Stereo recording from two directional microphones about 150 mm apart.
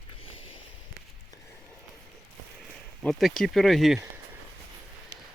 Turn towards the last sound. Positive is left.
turn(degrees=0)  # may be behind; listen again after turning